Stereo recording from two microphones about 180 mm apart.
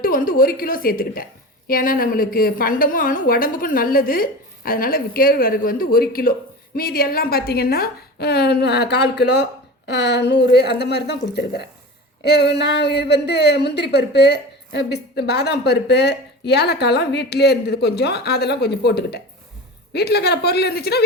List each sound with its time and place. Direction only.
0.0 s a woman's voice: 50° left (ahead or behind); by 11.2 s 70° left (ahead or behind)
12.2 s a woman's voice: 70° left (ahead or behind)